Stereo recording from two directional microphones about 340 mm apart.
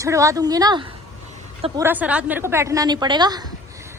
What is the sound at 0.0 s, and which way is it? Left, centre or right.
A woman's voice, centre.